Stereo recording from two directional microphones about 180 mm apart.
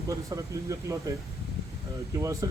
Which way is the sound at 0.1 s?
20° right (ahead or behind).